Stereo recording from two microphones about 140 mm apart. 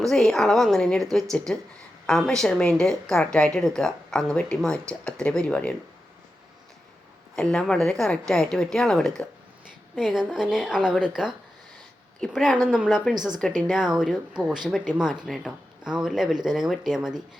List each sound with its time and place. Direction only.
0.0 s speech: centre (ahead or behind)
7.3 s speech: 5° left (ahead or behind)
13.1 s speech: 30° right (ahead or behind)
13.7 s speech: 5° right (ahead or behind)